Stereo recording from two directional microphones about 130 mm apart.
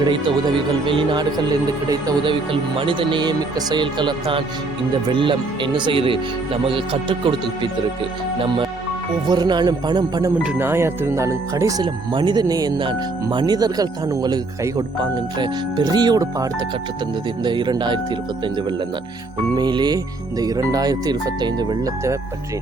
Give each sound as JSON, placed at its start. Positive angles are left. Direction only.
{"t": 0.0, "sound": "speech", "side_deg": -40}
{"t": 10.4, "sound": "speech", "side_deg": -15}
{"t": 19.5, "sound": "speech", "side_deg": -35}